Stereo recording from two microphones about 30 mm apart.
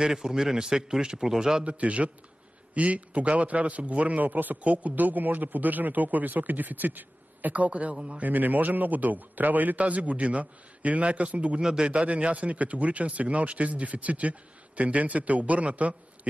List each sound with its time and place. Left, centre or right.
0.0 s a man's voice: right
1.6 s speech: right
4.2 s a man's voice: right
4.6 s a man's voice: right
7.5 s speech: right
7.9 s a man's voice: right
8.2 s a man's voice: right
9.8 s speech: right
11.6 s a man's voice: right
11.9 s speech: right